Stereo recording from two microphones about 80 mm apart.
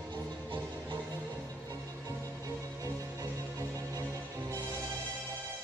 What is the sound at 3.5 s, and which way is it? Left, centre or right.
Music, right.